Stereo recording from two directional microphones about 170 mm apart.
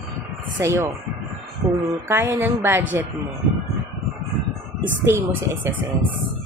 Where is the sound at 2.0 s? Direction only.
10° right (ahead or behind).